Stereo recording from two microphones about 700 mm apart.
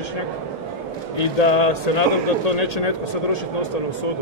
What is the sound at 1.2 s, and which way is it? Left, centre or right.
Speech, left.